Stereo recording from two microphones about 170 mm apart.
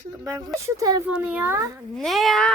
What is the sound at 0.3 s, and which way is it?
Speech, 20° right (ahead or behind).